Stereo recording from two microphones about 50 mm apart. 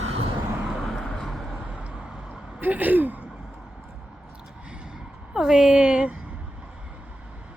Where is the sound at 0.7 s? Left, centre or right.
Centre.